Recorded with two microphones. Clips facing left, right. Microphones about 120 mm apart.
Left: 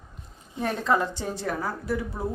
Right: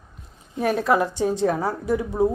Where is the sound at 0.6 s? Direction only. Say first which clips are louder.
Right 5 dB; 10° right (ahead or behind).